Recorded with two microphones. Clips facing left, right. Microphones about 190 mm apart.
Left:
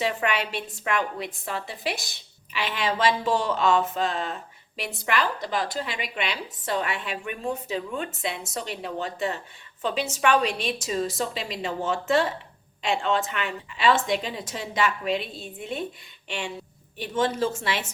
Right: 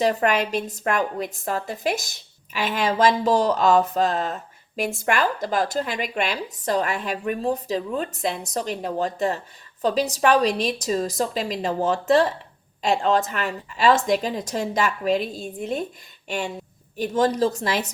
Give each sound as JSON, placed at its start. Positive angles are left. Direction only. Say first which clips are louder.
{"t": 0.0, "sound": "a woman's voice", "louder": "right 6 dB", "side_deg": -40}
{"t": 17.0, "sound": "a woman's voice", "louder": "right 5 dB", "side_deg": -40}